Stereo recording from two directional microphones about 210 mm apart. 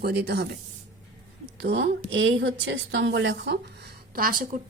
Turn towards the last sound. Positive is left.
turn(degrees=-40)  # may be behind; listen again after turning